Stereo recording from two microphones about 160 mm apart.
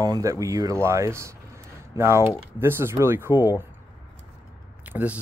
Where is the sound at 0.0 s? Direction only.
20° right (ahead or behind).